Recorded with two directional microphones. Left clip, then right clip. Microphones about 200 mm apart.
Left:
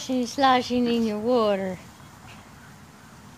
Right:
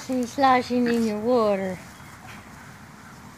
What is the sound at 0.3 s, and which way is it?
Speech, 55° left (ahead or behind).